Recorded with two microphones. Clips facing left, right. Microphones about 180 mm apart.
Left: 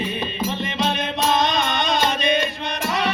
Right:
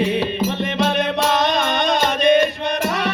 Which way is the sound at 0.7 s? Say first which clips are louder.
Right 5 dB; 65° right (ahead or behind).